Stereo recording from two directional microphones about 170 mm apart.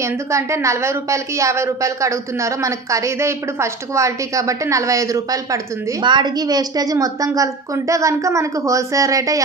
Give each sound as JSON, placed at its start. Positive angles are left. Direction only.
{"t": 0.0, "sound": "a woman's voice", "side_deg": -15}